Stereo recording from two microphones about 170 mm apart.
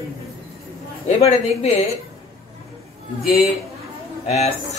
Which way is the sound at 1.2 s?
40° left (ahead or behind).